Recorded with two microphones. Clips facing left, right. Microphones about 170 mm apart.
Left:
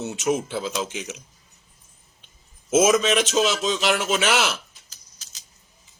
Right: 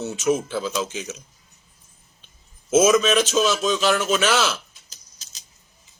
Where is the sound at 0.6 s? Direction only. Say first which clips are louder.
Right 2 dB; 20° left (ahead or behind).